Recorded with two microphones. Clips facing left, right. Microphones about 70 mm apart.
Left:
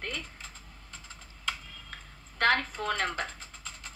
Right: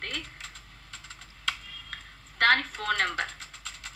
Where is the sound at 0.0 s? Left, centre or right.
Right.